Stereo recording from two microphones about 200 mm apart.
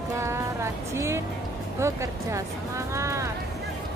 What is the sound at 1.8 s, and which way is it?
Speech, 15° right (ahead or behind).